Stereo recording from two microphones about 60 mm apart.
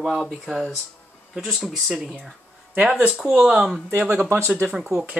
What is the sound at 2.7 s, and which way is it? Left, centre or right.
Speech, right.